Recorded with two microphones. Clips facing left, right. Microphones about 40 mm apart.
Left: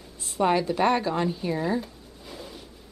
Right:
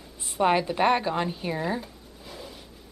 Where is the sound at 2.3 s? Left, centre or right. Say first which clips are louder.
Left 1 dB; centre.